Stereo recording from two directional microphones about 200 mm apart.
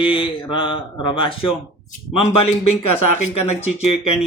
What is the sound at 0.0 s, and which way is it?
Speech, 25° left (ahead or behind).